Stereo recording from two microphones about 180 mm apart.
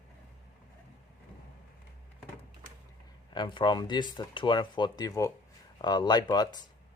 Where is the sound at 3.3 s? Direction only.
25° left (ahead or behind).